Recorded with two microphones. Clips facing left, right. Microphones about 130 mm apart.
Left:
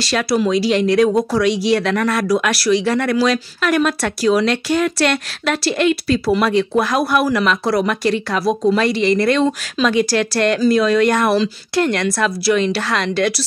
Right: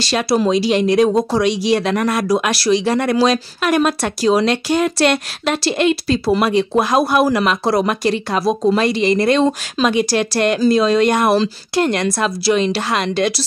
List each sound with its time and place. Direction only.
0.0 s speech: 25° right (ahead or behind)